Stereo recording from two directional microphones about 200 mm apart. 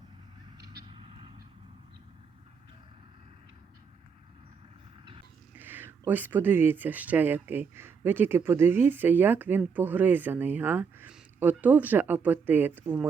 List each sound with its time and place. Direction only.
0.9 s vehicle: 25° right (ahead or behind)
5.5 s speech: 10° right (ahead or behind)